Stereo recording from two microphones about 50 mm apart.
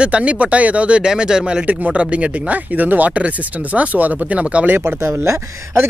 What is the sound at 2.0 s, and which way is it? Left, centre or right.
Speech, right.